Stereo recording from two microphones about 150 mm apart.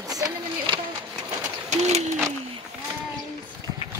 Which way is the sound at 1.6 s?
50° right (ahead or behind).